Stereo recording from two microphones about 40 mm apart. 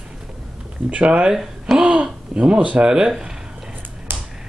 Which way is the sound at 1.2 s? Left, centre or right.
Centre.